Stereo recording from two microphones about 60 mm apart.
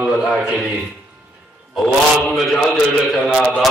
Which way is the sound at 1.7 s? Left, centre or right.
Centre.